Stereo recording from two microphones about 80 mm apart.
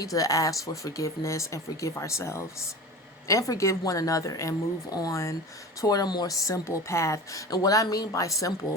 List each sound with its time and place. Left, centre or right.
0.0 s a woman's voice: left